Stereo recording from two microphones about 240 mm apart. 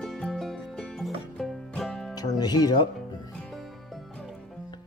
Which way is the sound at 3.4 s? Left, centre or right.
Centre.